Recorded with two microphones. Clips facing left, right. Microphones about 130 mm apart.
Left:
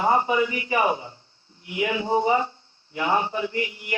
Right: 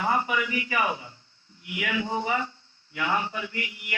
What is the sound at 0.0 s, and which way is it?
A man's voice, 30° left (ahead or behind).